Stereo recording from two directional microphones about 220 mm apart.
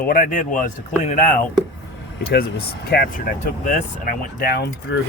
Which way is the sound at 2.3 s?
45° left (ahead or behind).